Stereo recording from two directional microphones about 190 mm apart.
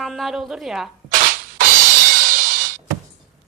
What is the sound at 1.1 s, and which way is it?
Music, 45° right (ahead or behind).